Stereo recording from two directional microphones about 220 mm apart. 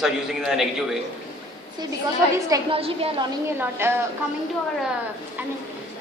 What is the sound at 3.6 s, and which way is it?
Speech, 10° right (ahead or behind).